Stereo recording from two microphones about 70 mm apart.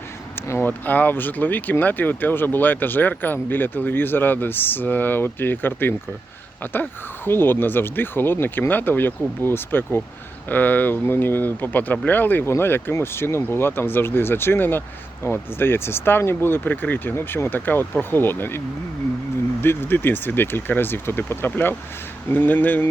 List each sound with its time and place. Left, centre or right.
0.3 s a sound: left
0.6 s speech: left
7.3 s speech: left
19.6 s speech: left